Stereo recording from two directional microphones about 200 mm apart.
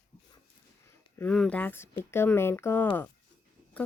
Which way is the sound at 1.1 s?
5° left (ahead or behind).